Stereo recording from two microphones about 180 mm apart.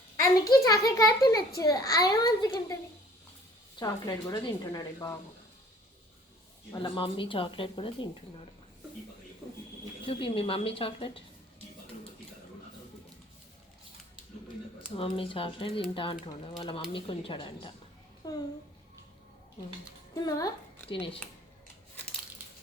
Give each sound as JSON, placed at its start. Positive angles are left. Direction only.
{"t": 0.6, "sound": "speech", "side_deg": 20}
{"t": 3.8, "sound": "speech", "side_deg": 20}
{"t": 6.7, "sound": "speech", "side_deg": 30}
{"t": 10.1, "sound": "speech", "side_deg": 30}
{"t": 14.9, "sound": "a child's voice", "side_deg": 30}
{"t": 20.2, "sound": "speech", "side_deg": 20}